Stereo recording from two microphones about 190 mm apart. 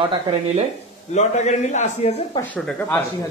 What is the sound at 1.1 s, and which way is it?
Speech, 35° left (ahead or behind).